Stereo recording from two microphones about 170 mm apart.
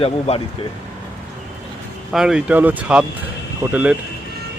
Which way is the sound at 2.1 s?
5° right (ahead or behind).